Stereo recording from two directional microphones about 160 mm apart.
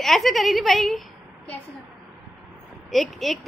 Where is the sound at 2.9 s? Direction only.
Centre (ahead or behind).